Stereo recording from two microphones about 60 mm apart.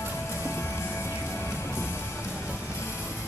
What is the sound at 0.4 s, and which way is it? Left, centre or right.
Music, left.